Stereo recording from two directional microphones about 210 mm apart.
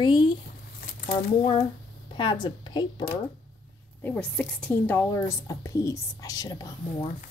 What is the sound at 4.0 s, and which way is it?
A woman's voice, 5° left (ahead or behind).